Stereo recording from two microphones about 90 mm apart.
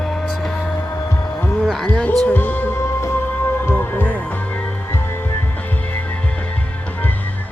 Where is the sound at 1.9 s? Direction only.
15° left (ahead or behind).